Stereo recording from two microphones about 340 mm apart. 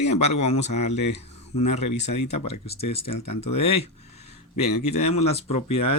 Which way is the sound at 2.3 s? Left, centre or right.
Left.